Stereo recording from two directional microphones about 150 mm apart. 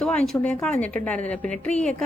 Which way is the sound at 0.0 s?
5° left (ahead or behind).